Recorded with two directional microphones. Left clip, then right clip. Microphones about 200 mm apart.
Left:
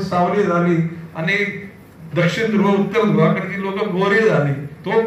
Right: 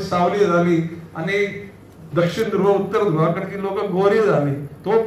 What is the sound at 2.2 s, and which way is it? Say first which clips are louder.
A man's voice: left 1 dB; 40° right (ahead or behind).